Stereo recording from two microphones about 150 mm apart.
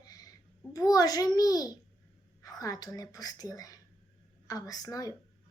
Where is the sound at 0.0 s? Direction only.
25° left (ahead or behind).